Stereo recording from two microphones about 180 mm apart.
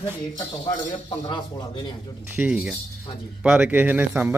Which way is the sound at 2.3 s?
5° right (ahead or behind).